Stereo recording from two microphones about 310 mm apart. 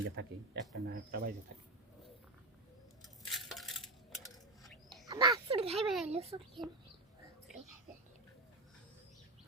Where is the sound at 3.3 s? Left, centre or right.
Centre.